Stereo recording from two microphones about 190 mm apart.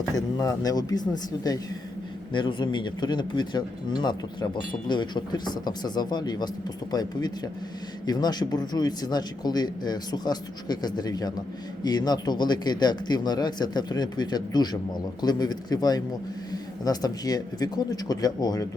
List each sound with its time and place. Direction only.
0.3 s speech: 20° left (ahead or behind)